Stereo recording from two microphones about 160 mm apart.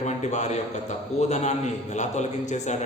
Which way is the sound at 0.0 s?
45° left (ahead or behind).